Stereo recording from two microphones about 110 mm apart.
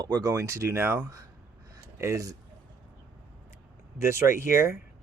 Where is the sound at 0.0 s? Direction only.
35° right (ahead or behind).